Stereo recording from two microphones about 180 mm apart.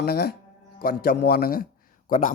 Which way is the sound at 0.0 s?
60° left (ahead or behind).